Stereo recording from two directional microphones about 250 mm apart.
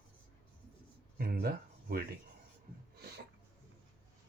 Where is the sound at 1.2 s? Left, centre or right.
Right.